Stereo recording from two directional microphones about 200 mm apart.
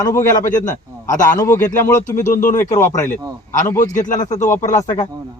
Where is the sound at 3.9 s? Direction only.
40° left (ahead or behind).